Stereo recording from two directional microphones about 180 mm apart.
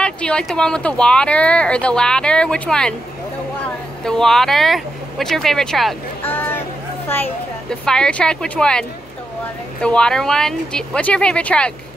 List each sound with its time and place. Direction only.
0.0 s speech: 5° left (ahead or behind)
6.2 s a sound: 10° left (ahead or behind)
7.1 s speech: 10° left (ahead or behind)